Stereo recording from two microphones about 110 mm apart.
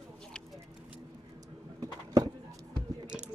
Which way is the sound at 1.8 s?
35° right (ahead or behind).